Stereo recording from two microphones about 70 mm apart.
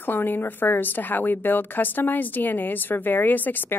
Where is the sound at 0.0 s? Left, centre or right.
Left.